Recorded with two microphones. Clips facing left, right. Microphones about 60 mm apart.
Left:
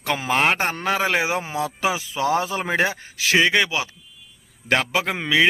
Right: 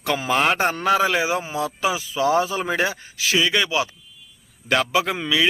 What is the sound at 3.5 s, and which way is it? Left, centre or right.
A man's voice, left.